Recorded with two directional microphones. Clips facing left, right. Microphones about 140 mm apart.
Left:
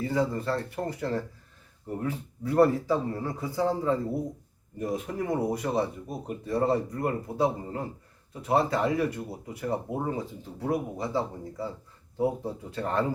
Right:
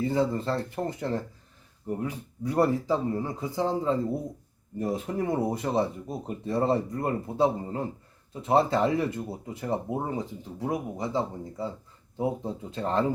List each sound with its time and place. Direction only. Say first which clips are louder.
0.0 s speech: right 2 dB; 25° right (ahead or behind)